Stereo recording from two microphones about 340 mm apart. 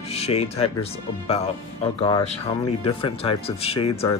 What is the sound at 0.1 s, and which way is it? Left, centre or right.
Speech, centre.